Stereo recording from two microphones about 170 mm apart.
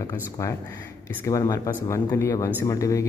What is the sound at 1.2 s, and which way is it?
Speech, 20° left (ahead or behind).